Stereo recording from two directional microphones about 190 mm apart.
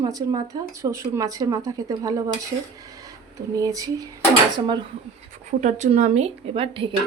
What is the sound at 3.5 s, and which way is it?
Speech, 20° right (ahead or behind).